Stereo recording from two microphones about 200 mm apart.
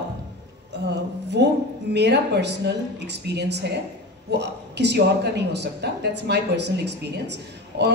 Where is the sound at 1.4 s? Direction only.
55° right (ahead or behind).